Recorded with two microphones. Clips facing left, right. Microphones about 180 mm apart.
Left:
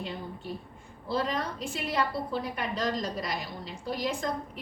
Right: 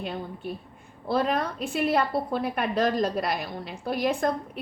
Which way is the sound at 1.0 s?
60° right (ahead or behind).